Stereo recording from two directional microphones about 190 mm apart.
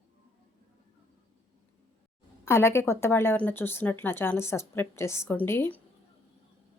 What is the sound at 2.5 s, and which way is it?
A woman's voice, 15° left (ahead or behind).